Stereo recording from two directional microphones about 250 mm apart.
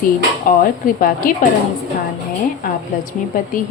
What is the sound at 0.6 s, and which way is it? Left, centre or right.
Speech, left.